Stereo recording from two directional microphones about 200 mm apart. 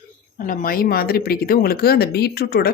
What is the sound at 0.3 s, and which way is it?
A woman's voice, 45° left (ahead or behind).